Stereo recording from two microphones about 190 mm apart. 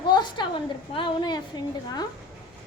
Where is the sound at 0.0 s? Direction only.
25° left (ahead or behind).